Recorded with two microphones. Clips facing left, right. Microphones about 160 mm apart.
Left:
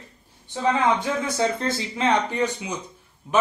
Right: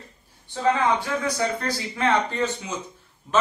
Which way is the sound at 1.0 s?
20° left (ahead or behind).